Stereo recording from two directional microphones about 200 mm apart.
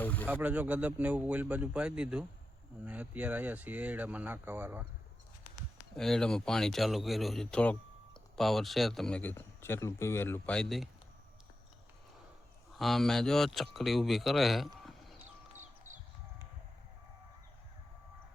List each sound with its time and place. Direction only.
0.0 s speech: 10° left (ahead or behind)
0.3 s speech: 10° right (ahead or behind)
6.0 s speech: centre (ahead or behind)
12.8 s speech: centre (ahead or behind)
15.6 s music: 40° right (ahead or behind)